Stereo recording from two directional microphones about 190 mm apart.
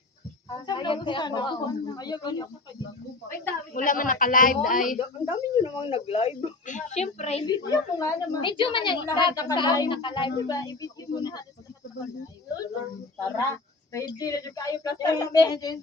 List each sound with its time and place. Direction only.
0.5 s a woman's voice: 25° left (ahead or behind)
3.8 s a woman's voice: 45° left (ahead or behind)
5.3 s speech: 25° left (ahead or behind)
7.4 s a woman's voice: 20° left (ahead or behind)
13.3 s a woman's voice: 20° left (ahead or behind)